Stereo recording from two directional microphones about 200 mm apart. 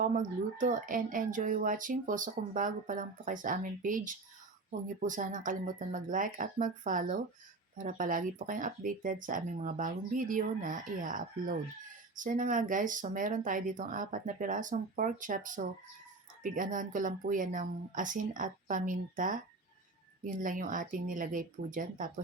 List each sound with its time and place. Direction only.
0.0 s speech: 40° right (ahead or behind)